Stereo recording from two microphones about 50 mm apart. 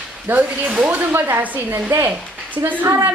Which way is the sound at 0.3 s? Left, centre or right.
Right.